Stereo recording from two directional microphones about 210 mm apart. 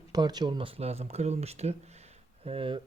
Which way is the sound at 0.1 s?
20° right (ahead or behind).